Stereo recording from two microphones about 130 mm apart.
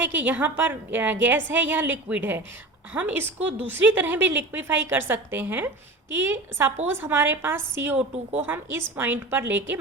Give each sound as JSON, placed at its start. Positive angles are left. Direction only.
{"t": 0.0, "sound": "a woman's voice", "side_deg": -15}